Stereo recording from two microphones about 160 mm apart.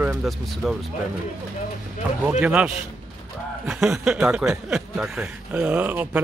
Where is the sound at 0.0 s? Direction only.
5° right (ahead or behind).